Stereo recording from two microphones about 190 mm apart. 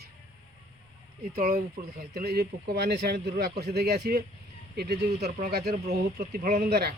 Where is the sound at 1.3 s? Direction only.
50° right (ahead or behind).